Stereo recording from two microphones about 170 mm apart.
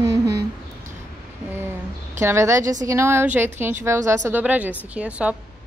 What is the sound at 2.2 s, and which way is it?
Speech, 15° right (ahead or behind).